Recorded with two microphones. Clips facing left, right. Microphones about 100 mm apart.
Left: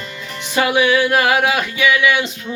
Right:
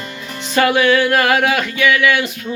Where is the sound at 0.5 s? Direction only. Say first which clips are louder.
Right 2 dB; 15° left (ahead or behind).